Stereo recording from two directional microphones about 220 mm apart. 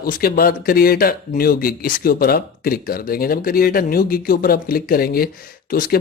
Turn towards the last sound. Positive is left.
turn(degrees=40)  # may be behind; listen again after turning